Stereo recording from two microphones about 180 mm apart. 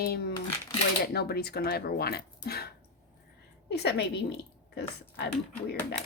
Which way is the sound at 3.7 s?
65° left (ahead or behind).